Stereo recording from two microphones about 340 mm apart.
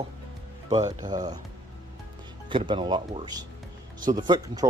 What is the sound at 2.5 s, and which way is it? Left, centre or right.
Speech, centre.